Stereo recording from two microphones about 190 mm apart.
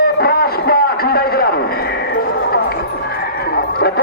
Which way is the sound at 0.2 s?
55° left (ahead or behind).